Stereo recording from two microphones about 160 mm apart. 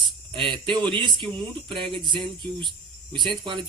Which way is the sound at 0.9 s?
30° right (ahead or behind).